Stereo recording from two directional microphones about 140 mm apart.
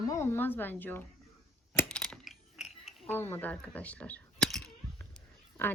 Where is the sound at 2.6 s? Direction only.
5° right (ahead or behind).